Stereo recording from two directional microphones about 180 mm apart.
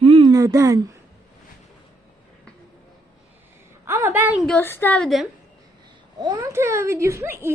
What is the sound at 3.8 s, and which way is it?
Speech, 15° right (ahead or behind).